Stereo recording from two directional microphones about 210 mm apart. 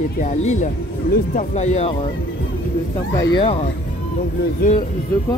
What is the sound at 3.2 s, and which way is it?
Speech, 25° left (ahead or behind).